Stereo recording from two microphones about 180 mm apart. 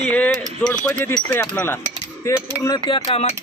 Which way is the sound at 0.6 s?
10° left (ahead or behind).